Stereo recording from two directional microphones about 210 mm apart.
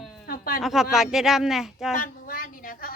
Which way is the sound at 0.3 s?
45° left (ahead or behind).